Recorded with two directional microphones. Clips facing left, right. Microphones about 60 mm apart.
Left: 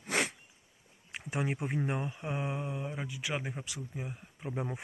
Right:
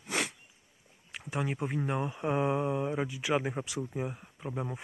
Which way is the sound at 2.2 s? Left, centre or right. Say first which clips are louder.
Right 7 dB; centre.